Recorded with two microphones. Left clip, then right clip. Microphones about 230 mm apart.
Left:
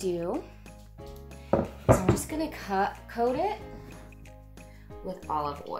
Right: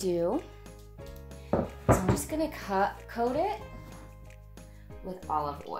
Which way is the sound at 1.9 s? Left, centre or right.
Centre.